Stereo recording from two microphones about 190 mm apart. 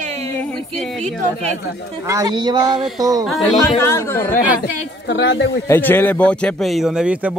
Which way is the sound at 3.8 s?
10° left (ahead or behind).